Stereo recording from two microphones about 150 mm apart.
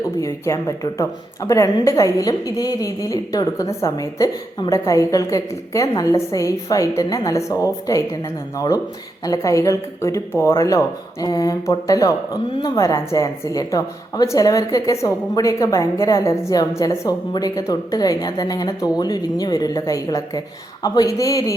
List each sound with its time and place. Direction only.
0.2 s speech: 20° left (ahead or behind)